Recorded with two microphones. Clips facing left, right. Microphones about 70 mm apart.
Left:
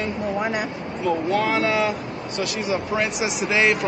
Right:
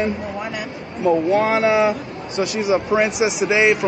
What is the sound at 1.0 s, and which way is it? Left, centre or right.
Speech, centre.